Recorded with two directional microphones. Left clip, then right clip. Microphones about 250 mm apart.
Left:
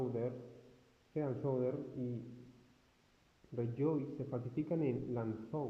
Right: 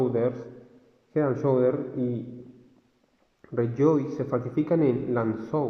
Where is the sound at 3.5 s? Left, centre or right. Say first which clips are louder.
Right 15 dB; right.